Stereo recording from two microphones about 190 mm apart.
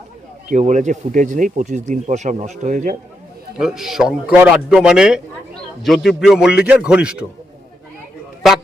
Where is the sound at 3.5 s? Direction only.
5° right (ahead or behind).